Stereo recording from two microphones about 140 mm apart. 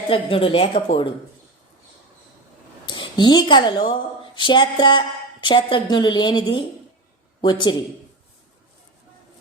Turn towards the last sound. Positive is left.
turn(degrees=35)  # may be behind; listen again after turning